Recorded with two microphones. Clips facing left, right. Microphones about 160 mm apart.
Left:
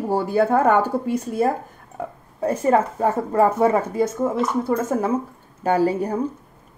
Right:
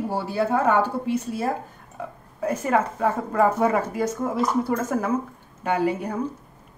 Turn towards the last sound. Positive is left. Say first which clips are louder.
# left 4 dB
turn(degrees=35)  # may be behind; listen again after turning